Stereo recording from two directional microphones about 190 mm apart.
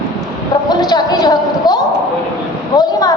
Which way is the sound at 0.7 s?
20° left (ahead or behind).